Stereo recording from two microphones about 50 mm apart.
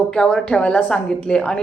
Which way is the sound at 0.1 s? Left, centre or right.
Centre.